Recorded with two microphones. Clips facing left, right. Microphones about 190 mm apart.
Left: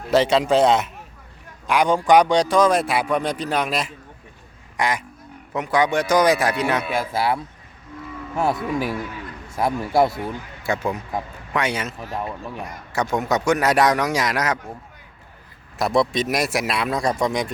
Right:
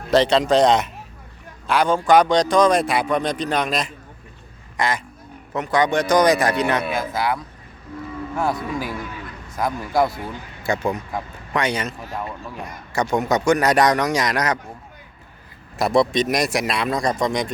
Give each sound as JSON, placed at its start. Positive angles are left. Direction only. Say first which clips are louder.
{"t": 0.1, "sound": "a man's voice", "louder": "right 1 dB", "side_deg": 10}
{"t": 6.9, "sound": "a man's voice", "louder": "left 1 dB", "side_deg": 30}
{"t": 10.6, "sound": "a man's voice", "louder": "right 2 dB", "side_deg": 5}
{"t": 15.8, "sound": "a man's voice", "louder": "right 2 dB", "side_deg": 0}